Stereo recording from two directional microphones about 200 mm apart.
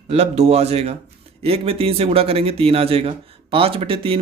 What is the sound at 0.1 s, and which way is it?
Speech, 30° right (ahead or behind).